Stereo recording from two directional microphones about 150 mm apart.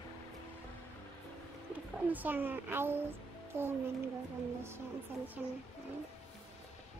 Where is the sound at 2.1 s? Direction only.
10° right (ahead or behind).